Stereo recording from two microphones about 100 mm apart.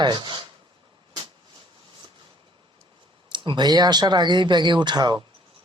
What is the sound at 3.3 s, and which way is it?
Speech, 50° right (ahead or behind).